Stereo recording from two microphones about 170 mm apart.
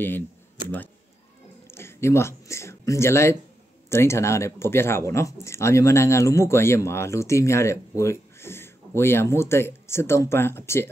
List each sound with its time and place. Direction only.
1.7 s speech: 15° left (ahead or behind)